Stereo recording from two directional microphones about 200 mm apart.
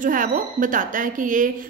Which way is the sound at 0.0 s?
40° right (ahead or behind).